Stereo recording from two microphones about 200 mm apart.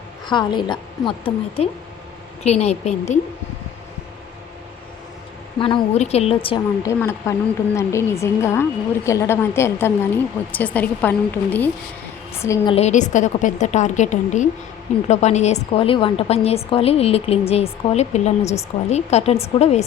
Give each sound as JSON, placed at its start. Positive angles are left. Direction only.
{"t": 0.3, "sound": "a woman's voice", "side_deg": 20}
{"t": 5.5, "sound": "a woman's voice", "side_deg": 25}
{"t": 6.8, "sound": "a woman's voice", "side_deg": 15}
{"t": 12.7, "sound": "a woman's voice", "side_deg": 35}